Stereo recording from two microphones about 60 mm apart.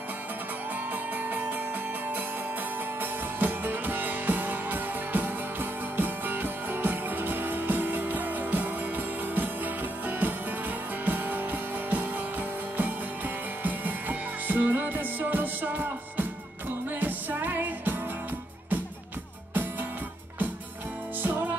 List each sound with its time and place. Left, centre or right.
3.0 s music: right
11.1 s music: right
13.6 s music: right
21.2 s music: right